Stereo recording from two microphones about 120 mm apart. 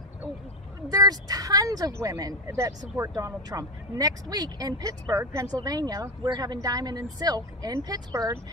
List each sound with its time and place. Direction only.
0.8 s speech: 30° right (ahead or behind)